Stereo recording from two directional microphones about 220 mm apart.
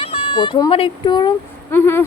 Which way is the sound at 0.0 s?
25° left (ahead or behind).